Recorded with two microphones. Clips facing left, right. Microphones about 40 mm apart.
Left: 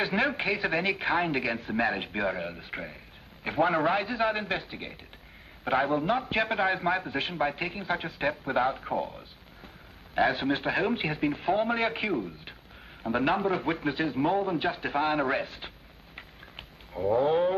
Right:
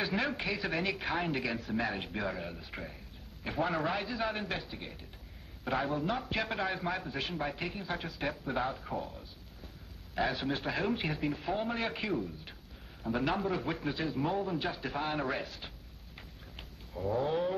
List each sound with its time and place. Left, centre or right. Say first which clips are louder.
0.0 s a man's voice: left 6 dB; left
17.0 s a man's voice: left 7 dB; left